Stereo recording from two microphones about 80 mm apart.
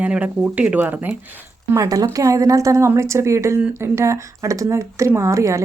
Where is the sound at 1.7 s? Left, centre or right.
Right.